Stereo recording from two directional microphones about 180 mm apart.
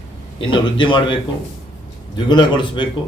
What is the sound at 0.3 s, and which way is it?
A man's voice, 25° left (ahead or behind).